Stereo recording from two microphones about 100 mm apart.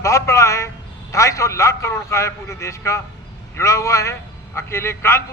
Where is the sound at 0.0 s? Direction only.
30° left (ahead or behind).